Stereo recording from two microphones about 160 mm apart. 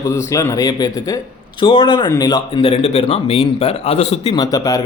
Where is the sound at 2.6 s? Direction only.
40° left (ahead or behind).